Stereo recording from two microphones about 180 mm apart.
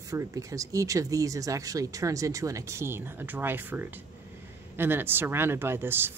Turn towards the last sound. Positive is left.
turn(degrees=-10)  # may be behind; listen again after turning